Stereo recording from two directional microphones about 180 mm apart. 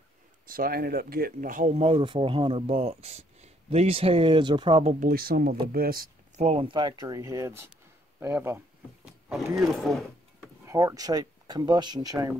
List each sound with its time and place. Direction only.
0.5 s speech: 55° right (ahead or behind); by 4.9 s 30° right (ahead or behind)
5.0 s speech: 55° right (ahead or behind)
6.3 s speech: 35° right (ahead or behind); by 8.5 s 15° right (ahead or behind)
9.0 s power windows: centre (ahead or behind)
9.6 s speech: centre (ahead or behind)
10.6 s speech: 15° right (ahead or behind)